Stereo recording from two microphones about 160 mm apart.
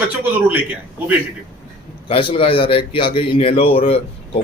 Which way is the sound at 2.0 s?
35° left (ahead or behind).